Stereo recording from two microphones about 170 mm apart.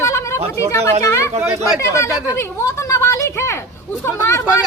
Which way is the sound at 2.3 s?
15° left (ahead or behind).